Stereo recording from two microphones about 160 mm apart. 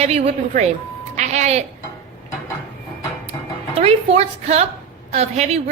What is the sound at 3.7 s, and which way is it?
A woman's voice, 35° right (ahead or behind).